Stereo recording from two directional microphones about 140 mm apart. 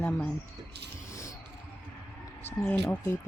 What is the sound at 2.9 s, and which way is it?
Speech, 20° left (ahead or behind).